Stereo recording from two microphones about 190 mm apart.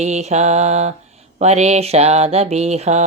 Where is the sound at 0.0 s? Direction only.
35° right (ahead or behind).